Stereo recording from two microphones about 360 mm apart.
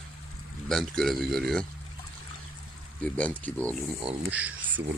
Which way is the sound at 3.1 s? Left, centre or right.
Centre.